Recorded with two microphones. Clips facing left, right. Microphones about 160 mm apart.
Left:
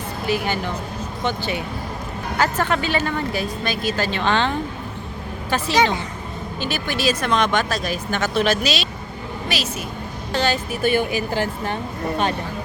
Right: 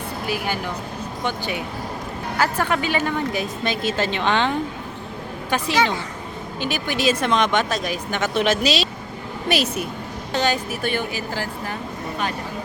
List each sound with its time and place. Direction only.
0.3 s a woman's voice: 10° right (ahead or behind)
5.7 s a woman's voice: 15° left (ahead or behind)
6.6 s speech: 15° right (ahead or behind)
9.5 s speech: 60° right (ahead or behind)
10.3 s speech: 15° right (ahead or behind)
10.7 s speech: 5° left (ahead or behind)
11.1 s speech: 25° left (ahead or behind)